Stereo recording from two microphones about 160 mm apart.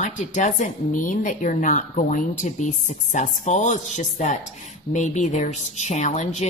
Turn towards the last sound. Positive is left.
turn(degrees=45)  # may be behind; listen again after turning